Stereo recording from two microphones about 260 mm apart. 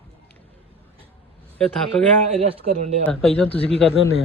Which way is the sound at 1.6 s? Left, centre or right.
Centre.